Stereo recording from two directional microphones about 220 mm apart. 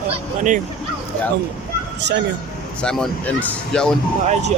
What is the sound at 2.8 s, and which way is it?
Speech, 5° left (ahead or behind).